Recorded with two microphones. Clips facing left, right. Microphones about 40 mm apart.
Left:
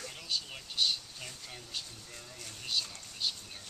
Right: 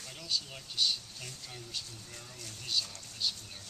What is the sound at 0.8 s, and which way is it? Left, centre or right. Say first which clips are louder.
Speech: left 1 dB; centre.